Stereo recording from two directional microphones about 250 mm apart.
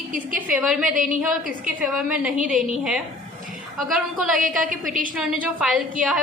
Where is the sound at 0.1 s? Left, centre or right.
Right.